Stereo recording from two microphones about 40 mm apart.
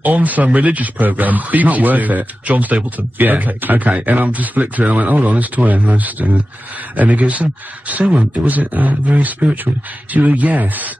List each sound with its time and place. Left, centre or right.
0.0 s speech: right